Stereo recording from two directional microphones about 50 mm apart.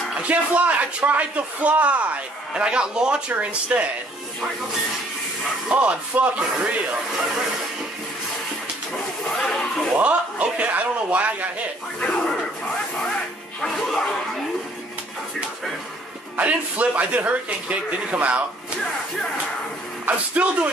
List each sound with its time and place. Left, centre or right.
0.2 s a man's voice: right
2.5 s a man's voice: centre
5.7 s a man's voice: right
9.5 s a sound: centre
9.9 s a man's voice: right
12.0 s speech: centre
13.6 s speech: centre
16.3 s a man's voice: right
20.1 s a man's voice: right